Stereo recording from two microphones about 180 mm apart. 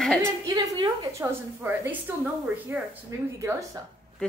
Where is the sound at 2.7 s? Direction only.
15° right (ahead or behind).